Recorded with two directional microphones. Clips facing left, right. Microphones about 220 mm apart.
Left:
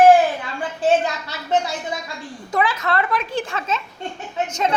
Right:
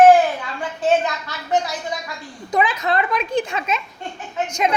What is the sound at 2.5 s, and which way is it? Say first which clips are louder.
A child's voice: right 1 dB; 15° right (ahead or behind).